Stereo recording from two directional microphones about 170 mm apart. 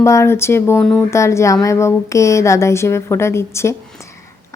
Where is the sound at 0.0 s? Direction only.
15° left (ahead or behind).